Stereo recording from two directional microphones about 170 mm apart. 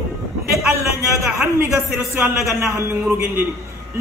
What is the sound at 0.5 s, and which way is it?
A man's voice, 15° right (ahead or behind).